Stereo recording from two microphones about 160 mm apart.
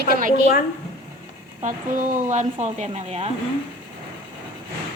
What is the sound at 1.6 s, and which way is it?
A woman's voice, 55° right (ahead or behind).